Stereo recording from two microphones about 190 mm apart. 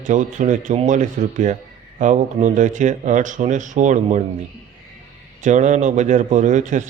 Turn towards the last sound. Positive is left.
turn(degrees=-40)  # may be behind; listen again after turning